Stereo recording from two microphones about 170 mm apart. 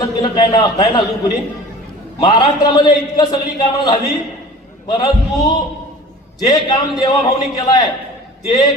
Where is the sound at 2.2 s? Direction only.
25° left (ahead or behind).